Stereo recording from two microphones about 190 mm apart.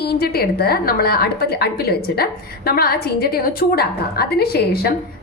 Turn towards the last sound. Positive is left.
turn(degrees=55)  # may be behind; listen again after turning